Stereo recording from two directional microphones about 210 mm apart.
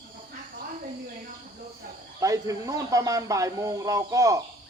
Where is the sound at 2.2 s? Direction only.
15° right (ahead or behind).